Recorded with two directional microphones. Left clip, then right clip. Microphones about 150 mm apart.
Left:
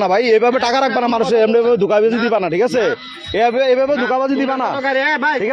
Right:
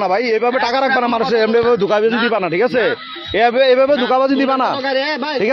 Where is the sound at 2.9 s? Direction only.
Centre (ahead or behind).